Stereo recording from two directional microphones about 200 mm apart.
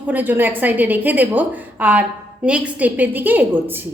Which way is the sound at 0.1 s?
10° right (ahead or behind).